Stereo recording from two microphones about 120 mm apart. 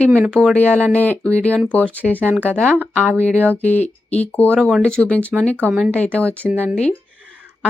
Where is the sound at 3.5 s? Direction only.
15° left (ahead or behind).